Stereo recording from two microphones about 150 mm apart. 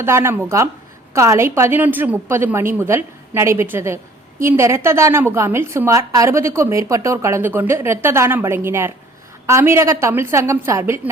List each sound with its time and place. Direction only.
0.0 s a woman's voice: 15° right (ahead or behind)